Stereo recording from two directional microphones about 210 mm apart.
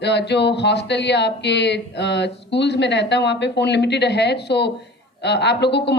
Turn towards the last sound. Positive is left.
turn(degrees=55)  # may be behind; listen again after turning